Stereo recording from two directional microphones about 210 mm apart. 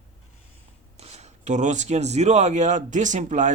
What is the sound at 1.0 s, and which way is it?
Speech, 30° right (ahead or behind).